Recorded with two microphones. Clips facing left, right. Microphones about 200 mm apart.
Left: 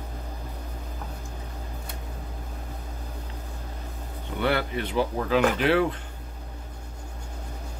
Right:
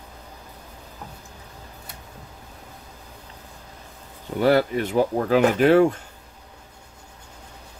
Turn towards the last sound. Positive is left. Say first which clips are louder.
# right 5 dB
turn(degrees=-45)  # may be behind; listen again after turning